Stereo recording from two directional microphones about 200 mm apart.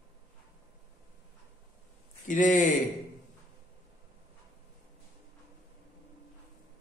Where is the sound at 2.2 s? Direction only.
40° left (ahead or behind).